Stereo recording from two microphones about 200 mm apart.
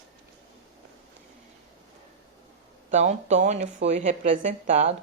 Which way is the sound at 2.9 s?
35° right (ahead or behind).